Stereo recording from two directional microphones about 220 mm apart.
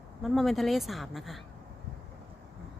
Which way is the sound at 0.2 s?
Centre (ahead or behind).